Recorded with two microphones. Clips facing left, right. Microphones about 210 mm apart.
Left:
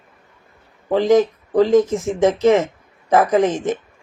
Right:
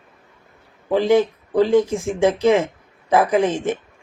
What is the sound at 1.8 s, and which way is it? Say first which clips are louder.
Speech: left 2 dB; 15° right (ahead or behind).